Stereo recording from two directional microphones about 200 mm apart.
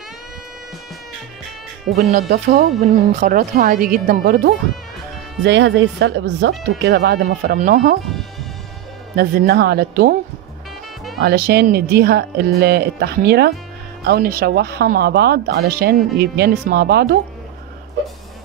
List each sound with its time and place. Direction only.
2.0 s speech: 40° right (ahead or behind)
5.4 s speech: 60° right (ahead or behind)
9.1 s speech: 50° right (ahead or behind)
11.1 s speech: 50° right (ahead or behind)